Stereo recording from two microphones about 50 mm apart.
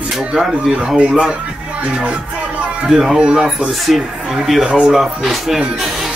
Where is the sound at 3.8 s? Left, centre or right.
Centre.